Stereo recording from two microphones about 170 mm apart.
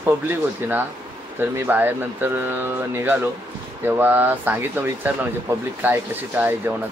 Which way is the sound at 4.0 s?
10° right (ahead or behind).